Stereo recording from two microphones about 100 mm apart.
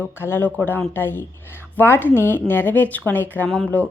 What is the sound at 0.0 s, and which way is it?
A woman's voice, 20° left (ahead or behind).